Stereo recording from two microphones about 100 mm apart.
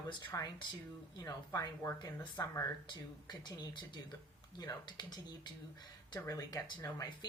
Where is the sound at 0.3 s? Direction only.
30° left (ahead or behind).